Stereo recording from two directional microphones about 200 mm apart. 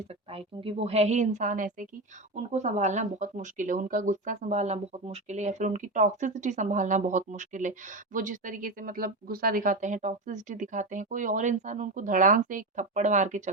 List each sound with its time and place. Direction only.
0.3 s speech: 30° right (ahead or behind)